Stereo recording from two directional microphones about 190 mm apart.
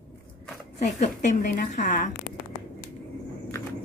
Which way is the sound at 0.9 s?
40° left (ahead or behind).